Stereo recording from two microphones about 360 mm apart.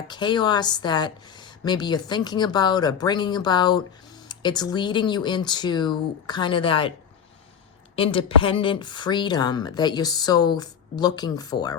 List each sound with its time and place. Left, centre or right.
0.1 s speech: centre
7.9 s speech: centre